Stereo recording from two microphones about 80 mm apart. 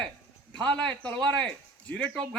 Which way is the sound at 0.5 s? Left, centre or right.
Centre.